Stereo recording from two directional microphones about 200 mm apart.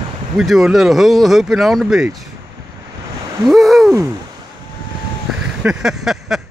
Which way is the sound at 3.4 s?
Centre (ahead or behind).